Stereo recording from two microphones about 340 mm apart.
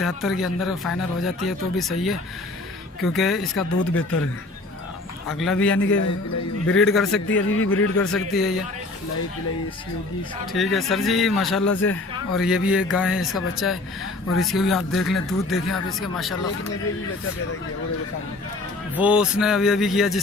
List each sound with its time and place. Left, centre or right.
0.0 s speech: centre
3.0 s speech: centre
5.3 s speech: centre
5.7 s a man's voice: left
6.7 s speech: centre
7.3 s a man's voice: left
8.1 s speech: centre
10.5 s speech: centre
18.9 s speech: centre